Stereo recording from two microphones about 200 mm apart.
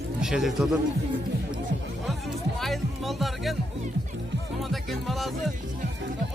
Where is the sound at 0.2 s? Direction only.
Centre (ahead or behind).